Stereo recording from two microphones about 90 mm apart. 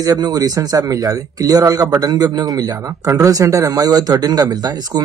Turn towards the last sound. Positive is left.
turn(degrees=-45)  # may be behind; listen again after turning